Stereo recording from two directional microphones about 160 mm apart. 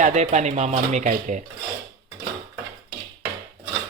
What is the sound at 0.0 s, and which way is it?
Speech, 45° right (ahead or behind).